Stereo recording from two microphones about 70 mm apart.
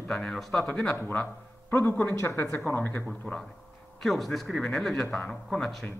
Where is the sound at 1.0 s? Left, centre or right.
Left.